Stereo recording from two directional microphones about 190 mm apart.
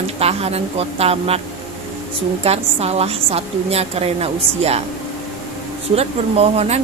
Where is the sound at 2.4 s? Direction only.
35° right (ahead or behind).